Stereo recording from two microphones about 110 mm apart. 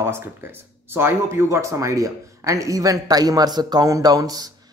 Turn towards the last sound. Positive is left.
turn(degrees=-35)  # may be behind; listen again after turning